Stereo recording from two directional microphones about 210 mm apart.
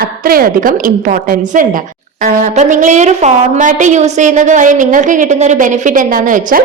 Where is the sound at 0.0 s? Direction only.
45° right (ahead or behind).